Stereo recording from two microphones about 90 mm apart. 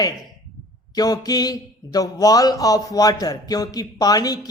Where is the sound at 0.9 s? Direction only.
45° left (ahead or behind).